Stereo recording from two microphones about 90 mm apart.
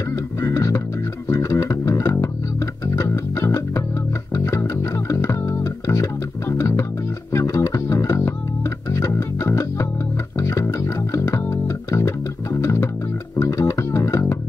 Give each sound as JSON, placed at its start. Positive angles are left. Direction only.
{"t": 0.4, "sound": "bass guitar", "side_deg": 35}
{"t": 3.0, "sound": "music", "side_deg": 35}
{"t": 5.1, "sound": "bass guitar", "side_deg": 35}
{"t": 7.3, "sound": "music", "side_deg": 35}
{"t": 12.5, "sound": "bass guitar", "side_deg": 35}